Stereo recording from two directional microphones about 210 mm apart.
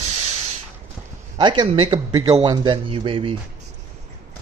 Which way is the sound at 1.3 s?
20° right (ahead or behind).